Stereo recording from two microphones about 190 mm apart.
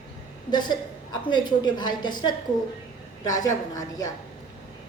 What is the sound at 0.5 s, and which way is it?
A woman's voice, 20° left (ahead or behind).